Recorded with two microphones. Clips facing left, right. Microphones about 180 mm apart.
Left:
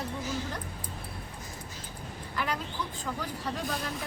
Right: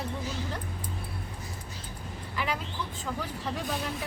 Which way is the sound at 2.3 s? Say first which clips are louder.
Right 1 dB; 5° right (ahead or behind).